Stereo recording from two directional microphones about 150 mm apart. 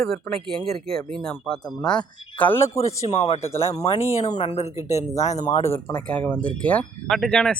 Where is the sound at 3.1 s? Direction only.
45° left (ahead or behind).